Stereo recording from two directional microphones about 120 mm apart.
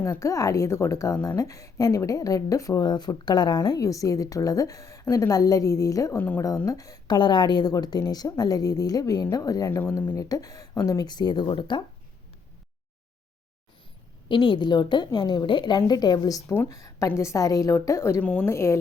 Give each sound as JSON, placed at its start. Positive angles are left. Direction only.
{"t": 0.0, "sound": "a woman's voice", "side_deg": 25}
{"t": 10.1, "sound": "a woman's voice", "side_deg": 30}
{"t": 14.3, "sound": "a woman's voice", "side_deg": 45}
{"t": 18.2, "sound": "a woman's voice", "side_deg": 10}
{"t": 18.4, "sound": "a woman's voice", "side_deg": 25}